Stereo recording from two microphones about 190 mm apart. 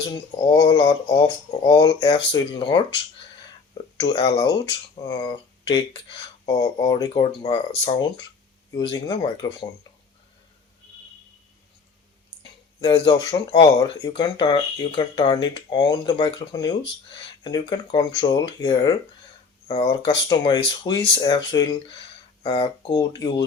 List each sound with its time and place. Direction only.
0.3 s speech: 25° left (ahead or behind)
4.0 s speech: 25° left (ahead or behind)
12.4 s speech: 20° left (ahead or behind)